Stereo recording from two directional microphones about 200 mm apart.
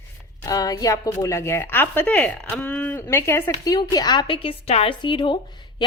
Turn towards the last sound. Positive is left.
turn(degrees=25)  # may be behind; listen again after turning